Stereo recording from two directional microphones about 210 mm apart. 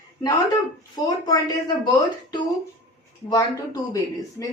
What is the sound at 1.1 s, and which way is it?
Speech, 15° left (ahead or behind).